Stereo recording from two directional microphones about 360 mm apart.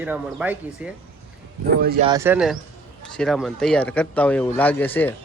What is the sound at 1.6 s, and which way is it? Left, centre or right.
Speech, right.